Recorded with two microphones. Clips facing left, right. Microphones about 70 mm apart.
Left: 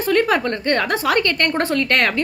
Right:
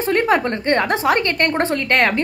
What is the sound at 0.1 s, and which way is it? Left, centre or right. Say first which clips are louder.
A woman's voice: even; right.